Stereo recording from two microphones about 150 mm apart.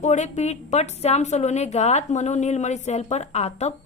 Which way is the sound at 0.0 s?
50° left (ahead or behind).